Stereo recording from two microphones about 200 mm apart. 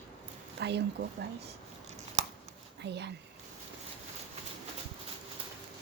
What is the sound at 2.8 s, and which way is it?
Speech, 60° right (ahead or behind).